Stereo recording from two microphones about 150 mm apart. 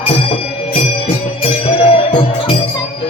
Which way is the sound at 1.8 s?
35° left (ahead or behind).